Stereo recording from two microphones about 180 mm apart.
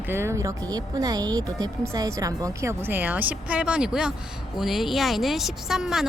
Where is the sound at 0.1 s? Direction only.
15° right (ahead or behind).